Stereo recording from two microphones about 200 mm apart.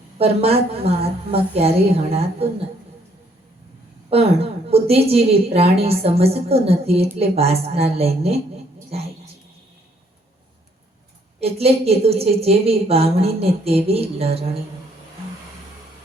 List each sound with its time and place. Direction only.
0.2 s a woman's voice: 30° right (ahead or behind)
4.1 s a woman's voice: 30° right (ahead or behind)
11.3 s a woman's voice: 30° right (ahead or behind)